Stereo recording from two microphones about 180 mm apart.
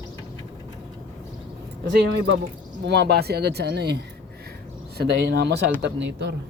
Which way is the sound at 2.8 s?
70° right (ahead or behind).